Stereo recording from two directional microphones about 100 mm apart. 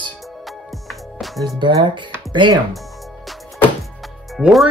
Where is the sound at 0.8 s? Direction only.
Centre (ahead or behind).